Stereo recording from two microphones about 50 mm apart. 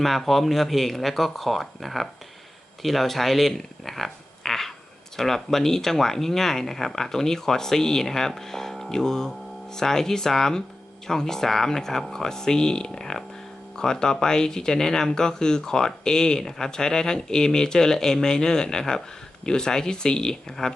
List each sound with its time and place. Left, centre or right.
0.0 s speech: centre